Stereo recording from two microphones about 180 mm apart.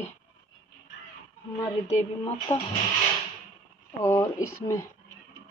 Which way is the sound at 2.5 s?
20° left (ahead or behind).